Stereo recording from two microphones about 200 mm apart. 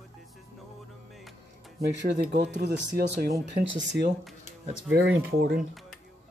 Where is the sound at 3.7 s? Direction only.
65° right (ahead or behind).